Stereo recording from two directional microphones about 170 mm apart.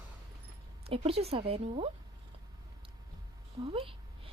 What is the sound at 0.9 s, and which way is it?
A woman's voice, 35° right (ahead or behind).